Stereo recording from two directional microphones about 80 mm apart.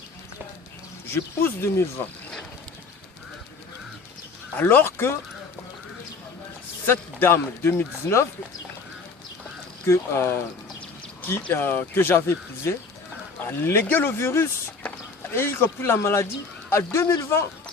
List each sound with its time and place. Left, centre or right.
1.1 s speech: left
4.5 s speech: left
6.8 s speech: left
9.8 s speech: left
11.5 s speech: left